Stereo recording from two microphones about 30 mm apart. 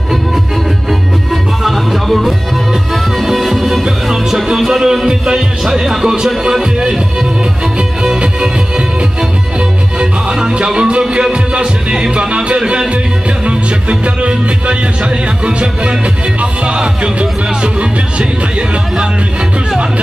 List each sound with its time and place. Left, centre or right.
1.3 s music: centre
3.8 s music: centre
4.6 s speech: centre
5.0 s music: right
5.9 s speech: centre
6.6 s music: right
9.9 s music: right